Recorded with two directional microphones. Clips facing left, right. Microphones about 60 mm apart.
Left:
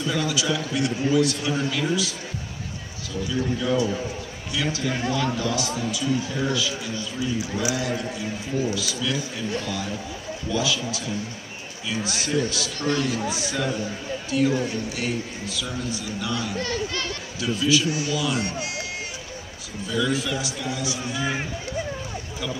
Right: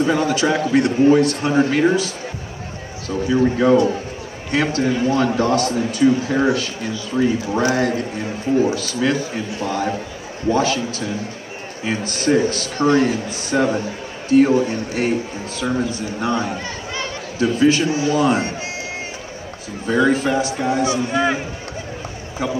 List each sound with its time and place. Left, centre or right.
0.0 s a man's voice: right
16.5 s chatter: right
17.4 s a man's voice: right
19.9 s a man's voice: right